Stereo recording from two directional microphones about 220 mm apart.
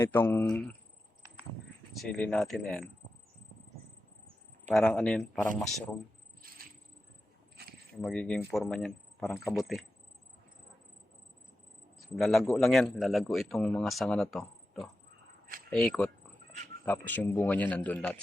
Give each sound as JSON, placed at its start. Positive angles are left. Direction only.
{"t": 0.0, "sound": "a man's voice", "side_deg": 10}
{"t": 2.0, "sound": "a man's voice", "side_deg": 5}
{"t": 4.7, "sound": "a man's voice", "side_deg": 0}
{"t": 7.6, "sound": "keys jangling", "side_deg": -45}
{"t": 8.0, "sound": "a man's voice", "side_deg": 5}
{"t": 12.1, "sound": "a man's voice", "side_deg": 0}